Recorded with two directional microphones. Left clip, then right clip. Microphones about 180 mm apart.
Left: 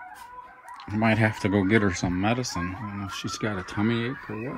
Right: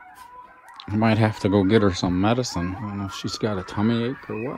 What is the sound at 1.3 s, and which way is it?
Speech, 25° right (ahead or behind).